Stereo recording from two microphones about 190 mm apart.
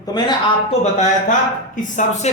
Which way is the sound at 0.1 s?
25° left (ahead or behind).